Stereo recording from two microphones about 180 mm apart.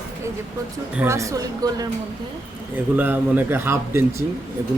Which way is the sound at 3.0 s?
10° right (ahead or behind).